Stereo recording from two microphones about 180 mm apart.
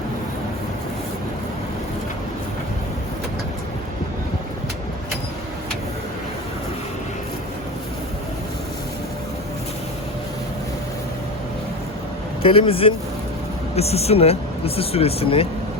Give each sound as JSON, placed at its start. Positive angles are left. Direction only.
{"t": 12.4, "sound": "speech", "side_deg": 30}